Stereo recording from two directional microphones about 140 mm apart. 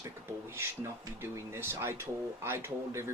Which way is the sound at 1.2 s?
15° right (ahead or behind).